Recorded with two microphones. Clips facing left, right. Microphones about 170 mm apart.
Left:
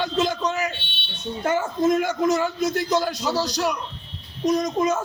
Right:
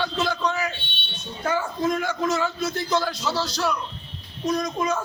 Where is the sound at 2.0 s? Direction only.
20° left (ahead or behind).